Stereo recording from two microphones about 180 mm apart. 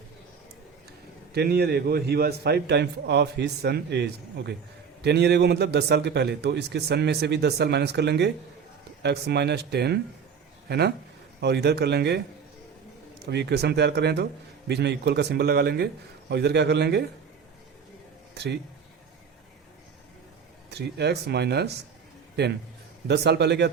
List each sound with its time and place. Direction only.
1.3 s a man's voice: 65° right (ahead or behind)
13.2 s a man's voice: 70° right (ahead or behind)
18.3 s speech: 65° right (ahead or behind)
20.7 s a man's voice: 65° right (ahead or behind)
23.0 s a man's voice: 65° right (ahead or behind)